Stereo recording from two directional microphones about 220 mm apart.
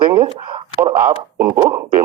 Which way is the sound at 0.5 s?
20° right (ahead or behind).